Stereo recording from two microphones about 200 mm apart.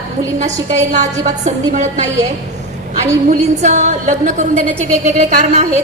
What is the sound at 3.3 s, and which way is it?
A woman's voice, 35° right (ahead or behind).